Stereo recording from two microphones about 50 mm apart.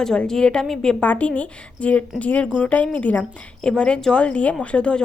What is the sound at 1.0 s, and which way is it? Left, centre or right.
A woman's voice, left.